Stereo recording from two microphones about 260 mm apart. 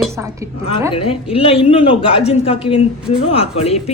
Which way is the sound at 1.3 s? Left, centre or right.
Left.